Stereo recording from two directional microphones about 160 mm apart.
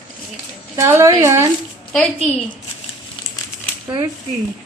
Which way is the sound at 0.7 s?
20° right (ahead or behind).